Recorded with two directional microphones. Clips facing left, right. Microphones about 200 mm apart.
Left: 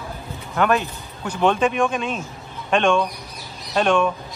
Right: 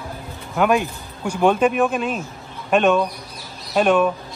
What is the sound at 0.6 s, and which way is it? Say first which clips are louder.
Speech: right 2 dB; 10° right (ahead or behind).